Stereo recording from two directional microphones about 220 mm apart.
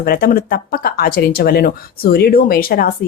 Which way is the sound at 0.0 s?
45° left (ahead or behind).